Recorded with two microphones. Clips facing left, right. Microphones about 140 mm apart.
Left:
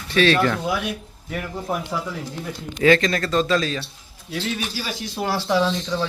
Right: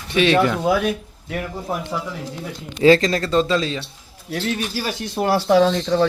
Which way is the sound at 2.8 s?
30° right (ahead or behind).